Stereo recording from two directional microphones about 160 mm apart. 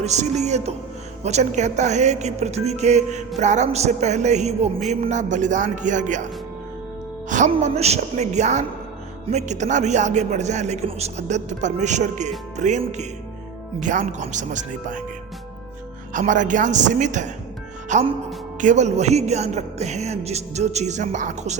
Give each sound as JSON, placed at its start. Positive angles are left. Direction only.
{"t": 0.0, "sound": "a woman's voice", "side_deg": -45}
{"t": 7.3, "sound": "music", "side_deg": -50}
{"t": 7.5, "sound": "a woman's voice", "side_deg": -40}
{"t": 16.1, "sound": "a woman's voice", "side_deg": -50}